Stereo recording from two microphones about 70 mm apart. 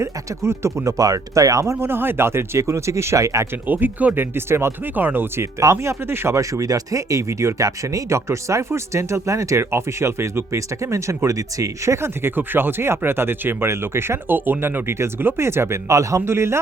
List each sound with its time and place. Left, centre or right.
0.0 s speech: right
3.5 s speech: right